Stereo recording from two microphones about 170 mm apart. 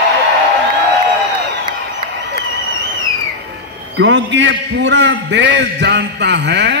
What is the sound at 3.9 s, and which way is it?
Mantra, 90° right.